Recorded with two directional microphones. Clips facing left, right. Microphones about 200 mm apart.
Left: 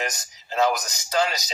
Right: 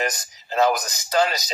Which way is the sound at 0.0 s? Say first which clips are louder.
Right 4 dB; 55° right (ahead or behind).